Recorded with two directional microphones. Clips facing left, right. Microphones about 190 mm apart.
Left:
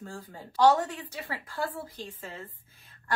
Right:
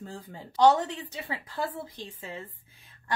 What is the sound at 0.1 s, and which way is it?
A woman's voice, 20° right (ahead or behind).